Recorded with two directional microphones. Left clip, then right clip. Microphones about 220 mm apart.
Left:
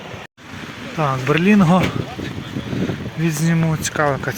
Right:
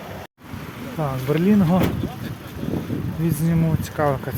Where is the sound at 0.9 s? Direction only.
15° left (ahead or behind).